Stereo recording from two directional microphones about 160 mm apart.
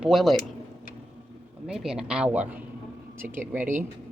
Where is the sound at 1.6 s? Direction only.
5° right (ahead or behind).